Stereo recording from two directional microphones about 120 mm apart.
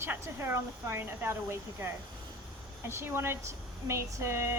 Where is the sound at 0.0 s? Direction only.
20° right (ahead or behind).